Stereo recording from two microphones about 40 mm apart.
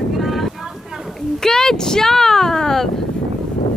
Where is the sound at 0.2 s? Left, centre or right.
Centre.